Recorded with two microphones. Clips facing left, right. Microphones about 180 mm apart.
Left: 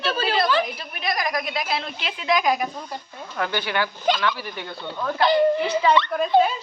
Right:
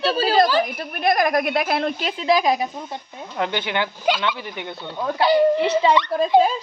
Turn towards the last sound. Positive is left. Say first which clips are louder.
# right 2 dB
turn(degrees=-25)  # may be behind; listen again after turning